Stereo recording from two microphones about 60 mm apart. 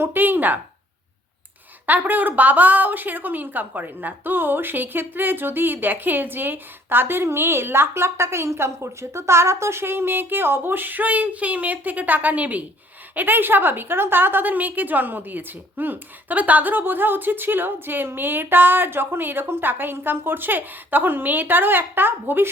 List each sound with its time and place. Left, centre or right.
0.0 s a woman's voice: right
1.9 s a woman's voice: right